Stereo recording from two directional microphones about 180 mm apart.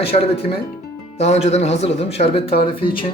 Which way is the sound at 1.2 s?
40° left (ahead or behind).